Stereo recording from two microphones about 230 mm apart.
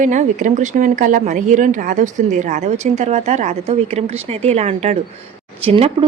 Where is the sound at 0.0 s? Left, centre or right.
Right.